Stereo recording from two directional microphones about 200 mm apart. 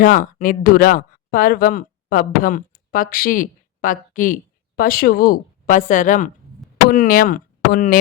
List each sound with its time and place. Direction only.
0.0 s a woman's voice: 45° left (ahead or behind)